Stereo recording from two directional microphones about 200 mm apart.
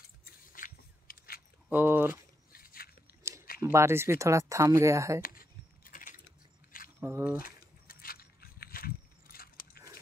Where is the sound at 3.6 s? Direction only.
15° right (ahead or behind).